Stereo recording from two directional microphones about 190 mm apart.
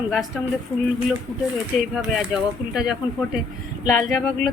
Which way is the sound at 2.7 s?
5° right (ahead or behind).